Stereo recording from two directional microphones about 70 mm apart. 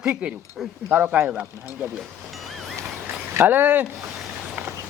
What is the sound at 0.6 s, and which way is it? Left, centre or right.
Speech, centre.